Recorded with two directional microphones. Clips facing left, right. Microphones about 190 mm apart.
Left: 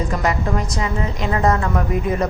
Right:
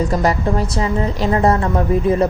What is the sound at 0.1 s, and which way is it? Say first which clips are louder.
A woman's voice: right 4 dB; 35° right (ahead or behind).